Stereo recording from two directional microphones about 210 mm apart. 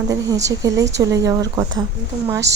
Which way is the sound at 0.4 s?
15° right (ahead or behind).